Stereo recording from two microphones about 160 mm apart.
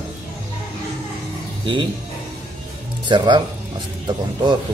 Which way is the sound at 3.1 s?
30° right (ahead or behind).